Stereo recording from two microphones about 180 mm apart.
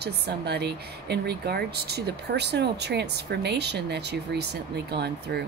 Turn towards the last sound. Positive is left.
turn(degrees=-65)  # may be behind; listen again after turning